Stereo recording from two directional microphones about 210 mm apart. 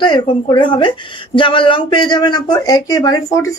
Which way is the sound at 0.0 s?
20° left (ahead or behind).